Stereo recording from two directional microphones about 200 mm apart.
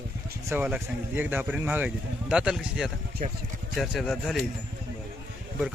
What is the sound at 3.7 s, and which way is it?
Speech, centre (ahead or behind).